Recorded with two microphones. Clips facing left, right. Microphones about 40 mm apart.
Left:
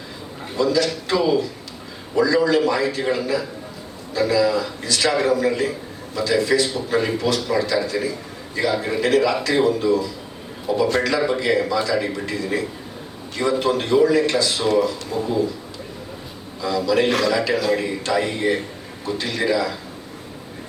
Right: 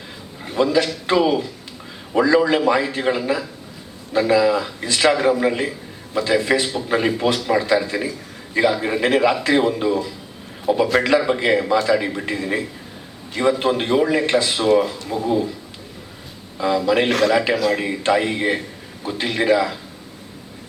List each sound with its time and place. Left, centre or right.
0.5 s a man's voice: right
16.6 s a man's voice: right
17.1 s a man's voice: centre
17.3 s a man's voice: right